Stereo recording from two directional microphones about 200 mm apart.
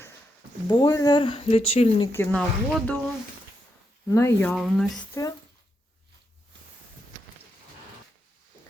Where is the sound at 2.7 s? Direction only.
5° left (ahead or behind).